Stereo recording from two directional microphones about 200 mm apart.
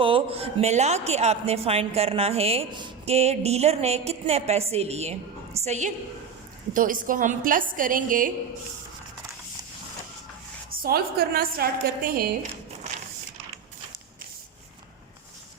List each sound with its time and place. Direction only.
0.0 s a woman's voice: 25° right (ahead or behind); by 8.3 s 45° right (ahead or behind)
10.7 s a woman's voice: 50° right (ahead or behind)